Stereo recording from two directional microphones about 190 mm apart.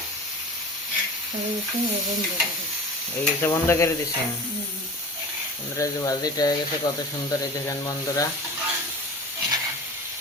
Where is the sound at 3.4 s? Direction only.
15° left (ahead or behind).